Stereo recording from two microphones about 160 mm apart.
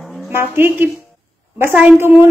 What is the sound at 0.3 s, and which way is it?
A woman's voice, 15° right (ahead or behind).